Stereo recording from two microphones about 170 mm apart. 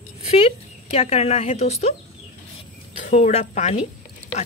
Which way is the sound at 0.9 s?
40° left (ahead or behind).